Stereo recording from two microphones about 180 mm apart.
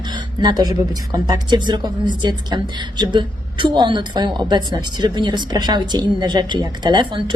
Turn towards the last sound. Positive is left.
turn(degrees=-25)  # may be behind; listen again after turning